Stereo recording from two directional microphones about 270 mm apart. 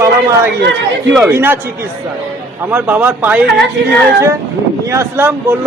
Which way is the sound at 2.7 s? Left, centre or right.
Centre.